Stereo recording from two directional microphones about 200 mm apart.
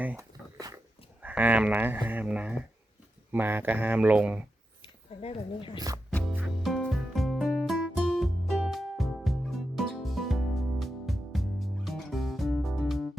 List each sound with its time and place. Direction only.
0.0 s dog: 10° right (ahead or behind)
1.2 s speech: 10° right (ahead or behind)
5.2 s speech: 25° left (ahead or behind)
5.7 s speech: 20° right (ahead or behind)
6.1 s music: 5° left (ahead or behind)